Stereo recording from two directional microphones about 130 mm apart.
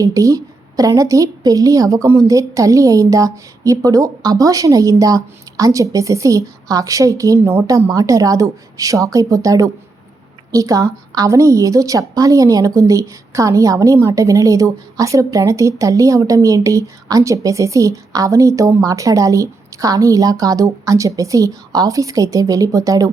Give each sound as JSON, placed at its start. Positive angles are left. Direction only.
{"t": 0.0, "sound": "a woman's voice", "side_deg": -25}